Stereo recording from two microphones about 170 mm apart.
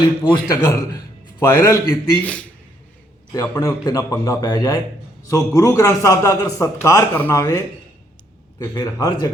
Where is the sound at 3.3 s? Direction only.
20° left (ahead or behind).